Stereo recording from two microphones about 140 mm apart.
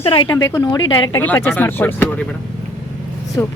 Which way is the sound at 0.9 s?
35° left (ahead or behind).